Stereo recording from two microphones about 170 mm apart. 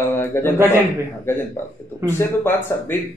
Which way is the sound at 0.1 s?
15° left (ahead or behind).